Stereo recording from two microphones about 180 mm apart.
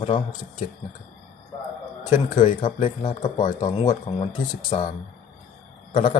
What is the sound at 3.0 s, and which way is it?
Speech, 25° left (ahead or behind).